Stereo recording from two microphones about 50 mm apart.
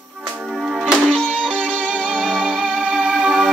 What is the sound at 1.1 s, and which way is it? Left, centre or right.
Music, right.